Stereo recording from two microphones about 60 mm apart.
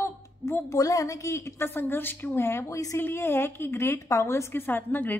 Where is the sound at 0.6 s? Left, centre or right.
Left.